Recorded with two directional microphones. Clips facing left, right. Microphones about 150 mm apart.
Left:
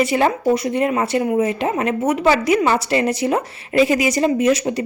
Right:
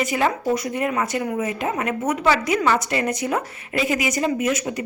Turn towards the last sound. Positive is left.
turn(degrees=35)  # may be behind; listen again after turning